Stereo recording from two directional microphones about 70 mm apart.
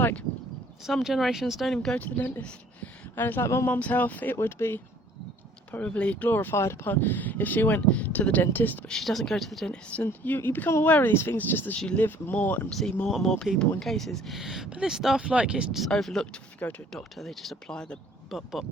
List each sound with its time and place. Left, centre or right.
0.0 s speech: left
0.9 s speech: centre
2.0 s speech: left
4.4 s speech: left
5.7 s speech: left
8.9 s speech: centre
10.0 s speech: left
13.1 s speech: centre
15.9 s speech: centre
16.6 s speech: left
16.9 s speech: centre
18.3 s speech: centre